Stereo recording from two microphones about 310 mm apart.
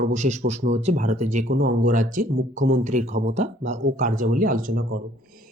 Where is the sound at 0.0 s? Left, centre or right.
Right.